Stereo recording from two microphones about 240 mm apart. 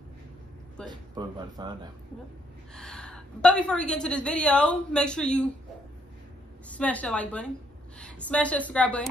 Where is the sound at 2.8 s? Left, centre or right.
Centre.